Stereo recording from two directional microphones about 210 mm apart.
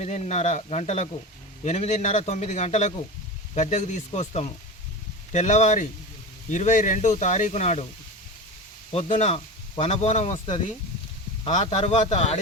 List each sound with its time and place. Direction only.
0.0 s speech: 30° left (ahead or behind)
8.9 s speech: 30° left (ahead or behind)